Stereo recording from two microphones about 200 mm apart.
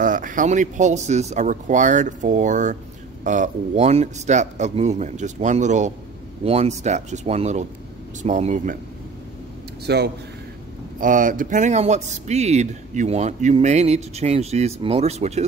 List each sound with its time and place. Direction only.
0.0 s speech: 40° right (ahead or behind)
9.8 s a man's voice: 55° right (ahead or behind)
11.0 s speech: 40° right (ahead or behind)